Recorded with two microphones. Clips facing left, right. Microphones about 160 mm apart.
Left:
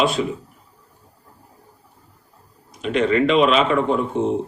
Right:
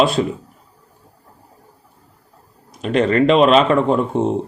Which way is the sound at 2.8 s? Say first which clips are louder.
Right 3 dB; 40° right (ahead or behind).